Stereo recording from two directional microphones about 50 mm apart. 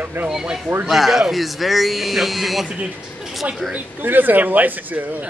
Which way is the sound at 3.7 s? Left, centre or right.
Right.